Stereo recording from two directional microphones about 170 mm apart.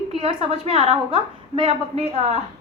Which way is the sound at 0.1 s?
35° right (ahead or behind).